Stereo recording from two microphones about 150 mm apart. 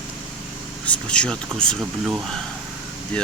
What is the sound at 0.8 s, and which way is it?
Speech, 5° left (ahead or behind).